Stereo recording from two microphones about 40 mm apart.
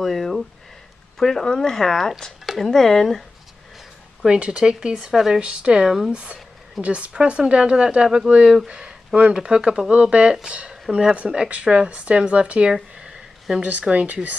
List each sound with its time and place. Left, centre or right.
0.0 s speech: centre
1.1 s a sound: centre
1.4 s speech: centre
2.4 s a sound: centre
2.7 s speech: centre
4.3 s speech: right
5.1 s speech: centre
5.4 s speech: right
9.3 s speech: centre
11.4 s speech: right